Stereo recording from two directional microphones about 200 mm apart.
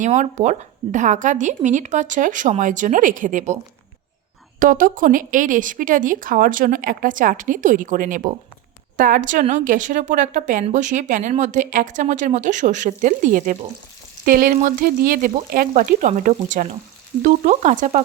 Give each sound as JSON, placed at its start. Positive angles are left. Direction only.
{"t": 0.0, "sound": "a woman's voice", "side_deg": -35}
{"t": 4.6, "sound": "a woman's voice", "side_deg": -45}